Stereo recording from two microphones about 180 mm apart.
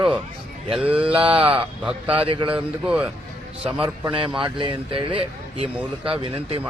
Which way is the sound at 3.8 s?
30° right (ahead or behind).